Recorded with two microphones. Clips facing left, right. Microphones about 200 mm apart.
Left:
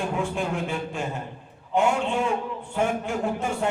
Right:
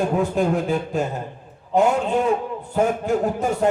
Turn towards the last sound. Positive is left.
turn(degrees=-40)  # may be behind; listen again after turning